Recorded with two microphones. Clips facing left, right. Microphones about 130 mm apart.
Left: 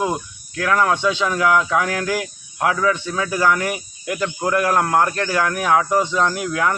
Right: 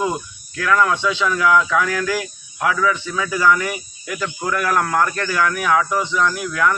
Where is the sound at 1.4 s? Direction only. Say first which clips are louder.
Right 2 dB; 25° left (ahead or behind); by 4.5 s 45° left (ahead or behind).